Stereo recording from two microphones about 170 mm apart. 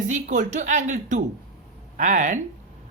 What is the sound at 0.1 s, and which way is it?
Speech, 45° right (ahead or behind).